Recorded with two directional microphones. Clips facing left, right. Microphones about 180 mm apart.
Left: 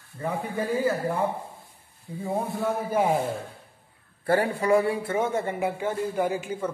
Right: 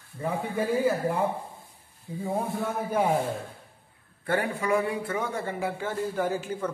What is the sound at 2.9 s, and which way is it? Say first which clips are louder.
Speech: left 1 dB; 10° left (ahead or behind).